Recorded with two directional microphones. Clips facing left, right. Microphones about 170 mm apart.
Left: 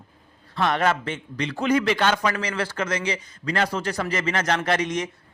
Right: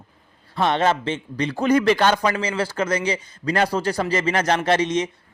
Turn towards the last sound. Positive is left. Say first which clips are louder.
# right 4 dB
turn(degrees=-25)  # may be behind; listen again after turning